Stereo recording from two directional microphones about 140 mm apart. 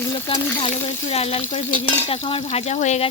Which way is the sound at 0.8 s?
45° left (ahead or behind).